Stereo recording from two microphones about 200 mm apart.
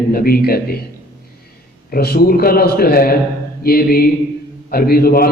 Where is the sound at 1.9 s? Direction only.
50° left (ahead or behind).